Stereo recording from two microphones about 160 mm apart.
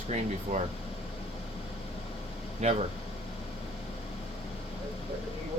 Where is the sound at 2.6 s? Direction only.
45° right (ahead or behind).